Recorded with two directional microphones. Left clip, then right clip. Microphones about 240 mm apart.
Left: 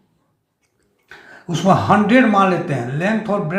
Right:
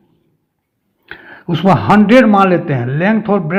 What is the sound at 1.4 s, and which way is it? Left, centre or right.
A man's voice, right.